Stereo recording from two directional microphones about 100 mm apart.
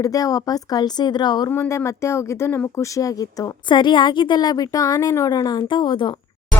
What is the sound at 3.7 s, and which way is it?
A woman's voice, 50° left (ahead or behind).